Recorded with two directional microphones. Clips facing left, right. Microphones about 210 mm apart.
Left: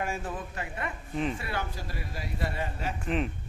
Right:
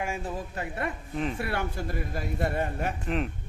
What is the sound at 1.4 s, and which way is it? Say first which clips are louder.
A man's voice: right 4 dB; 60° right (ahead or behind).